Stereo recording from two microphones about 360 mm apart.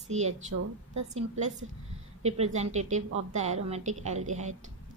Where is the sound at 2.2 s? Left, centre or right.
Centre.